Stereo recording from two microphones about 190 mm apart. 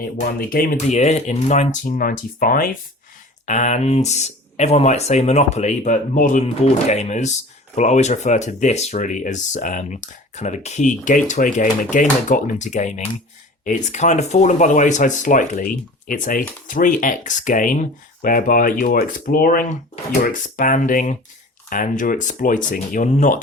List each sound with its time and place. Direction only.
0.2 s speech: 50° left (ahead or behind)